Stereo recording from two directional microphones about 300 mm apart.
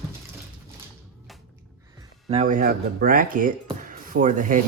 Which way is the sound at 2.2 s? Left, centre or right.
Right.